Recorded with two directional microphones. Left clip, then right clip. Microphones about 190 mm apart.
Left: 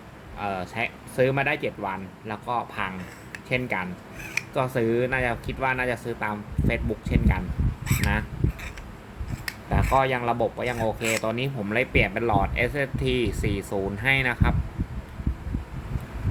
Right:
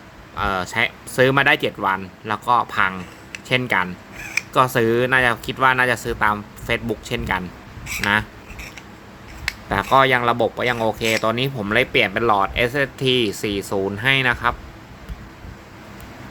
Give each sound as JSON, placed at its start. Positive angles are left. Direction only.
{"t": 0.3, "sound": "speech", "side_deg": -50}
{"t": 9.6, "sound": "speech", "side_deg": -45}